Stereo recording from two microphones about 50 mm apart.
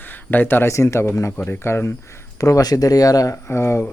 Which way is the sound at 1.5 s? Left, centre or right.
Left.